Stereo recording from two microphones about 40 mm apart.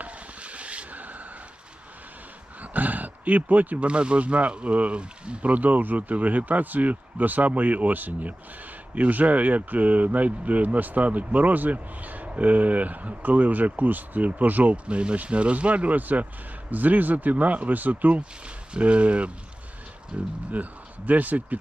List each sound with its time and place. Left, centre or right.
0.0 s vehicle: right
2.6 s wild animals: right
3.8 s speech: right
18.4 s speech: right
20.5 s a man's voice: right